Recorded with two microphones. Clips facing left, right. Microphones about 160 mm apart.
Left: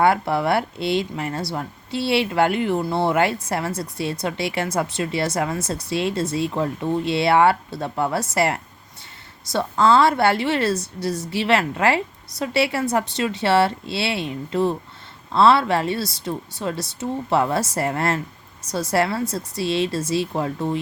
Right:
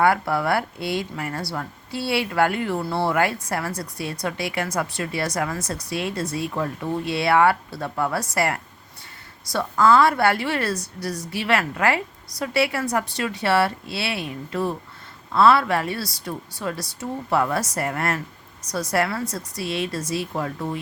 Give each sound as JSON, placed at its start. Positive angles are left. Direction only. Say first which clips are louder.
{"t": 0.0, "sound": "a woman's voice", "louder": "left 2 dB", "side_deg": 25}